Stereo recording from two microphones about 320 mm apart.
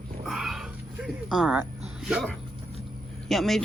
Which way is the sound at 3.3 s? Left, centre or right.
Centre.